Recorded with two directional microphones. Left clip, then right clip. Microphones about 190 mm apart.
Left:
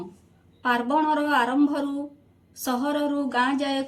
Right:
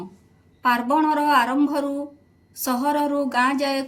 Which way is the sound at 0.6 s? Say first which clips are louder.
Right 3 dB; 35° right (ahead or behind).